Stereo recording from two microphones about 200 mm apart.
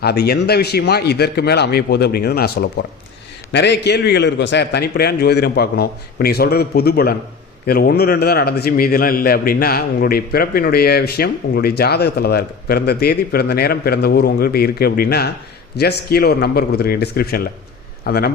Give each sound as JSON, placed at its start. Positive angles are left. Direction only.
{"t": 0.0, "sound": "a man's voice", "side_deg": 55}